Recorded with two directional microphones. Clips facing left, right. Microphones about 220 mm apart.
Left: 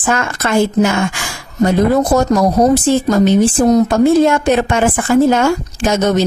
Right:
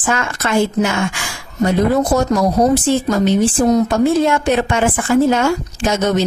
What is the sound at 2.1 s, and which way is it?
A woman's voice, 45° left (ahead or behind).